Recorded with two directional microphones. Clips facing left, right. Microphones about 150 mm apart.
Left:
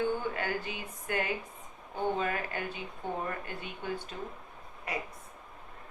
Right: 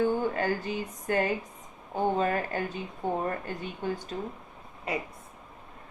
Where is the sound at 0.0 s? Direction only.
40° right (ahead or behind).